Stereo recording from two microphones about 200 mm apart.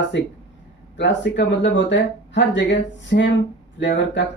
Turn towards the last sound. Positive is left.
turn(degrees=65)  # may be behind; listen again after turning